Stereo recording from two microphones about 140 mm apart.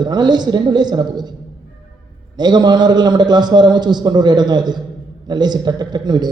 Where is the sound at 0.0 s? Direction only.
30° right (ahead or behind).